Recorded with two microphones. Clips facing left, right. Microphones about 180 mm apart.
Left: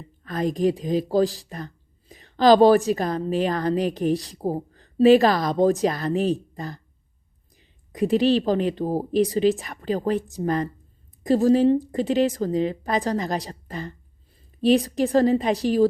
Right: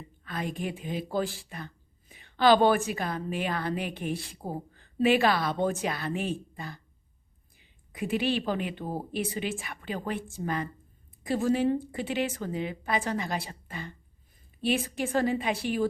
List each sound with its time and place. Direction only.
0.3 s a woman's voice: 40° left (ahead or behind)